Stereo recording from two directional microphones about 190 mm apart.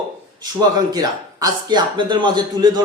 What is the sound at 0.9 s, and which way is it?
A man's voice, 20° right (ahead or behind).